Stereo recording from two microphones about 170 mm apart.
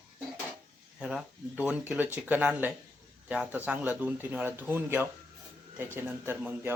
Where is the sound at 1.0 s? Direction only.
5° right (ahead or behind).